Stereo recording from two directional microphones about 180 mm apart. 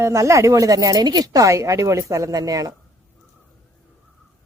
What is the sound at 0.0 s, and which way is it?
Speech, 15° right (ahead or behind).